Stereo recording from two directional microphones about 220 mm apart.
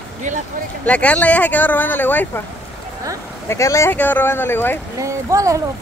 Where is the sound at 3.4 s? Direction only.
15° left (ahead or behind).